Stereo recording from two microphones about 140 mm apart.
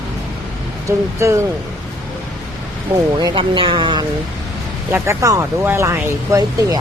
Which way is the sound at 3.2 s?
35° right (ahead or behind).